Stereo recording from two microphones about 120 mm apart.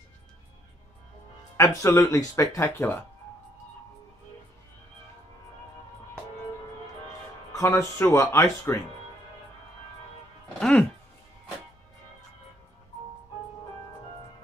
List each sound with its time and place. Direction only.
1.6 s speech: 25° left (ahead or behind)
7.5 s speech: 25° left (ahead or behind)
10.6 s music: 10° left (ahead or behind)